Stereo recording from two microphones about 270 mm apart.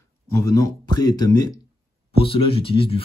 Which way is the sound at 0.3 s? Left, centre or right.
Centre.